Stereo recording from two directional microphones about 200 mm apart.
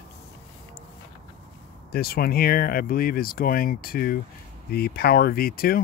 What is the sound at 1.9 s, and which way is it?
Speech, 50° left (ahead or behind).